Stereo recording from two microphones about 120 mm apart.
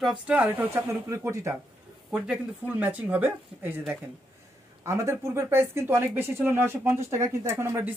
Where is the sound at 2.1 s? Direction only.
10° right (ahead or behind).